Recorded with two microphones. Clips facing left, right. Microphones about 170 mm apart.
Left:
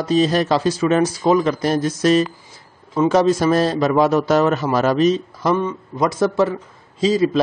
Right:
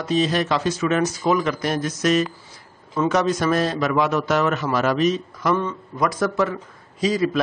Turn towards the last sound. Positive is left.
turn(degrees=25)  # may be behind; listen again after turning